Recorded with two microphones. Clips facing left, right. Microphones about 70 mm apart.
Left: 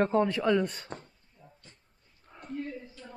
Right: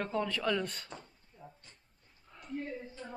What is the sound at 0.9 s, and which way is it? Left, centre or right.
Speech, left.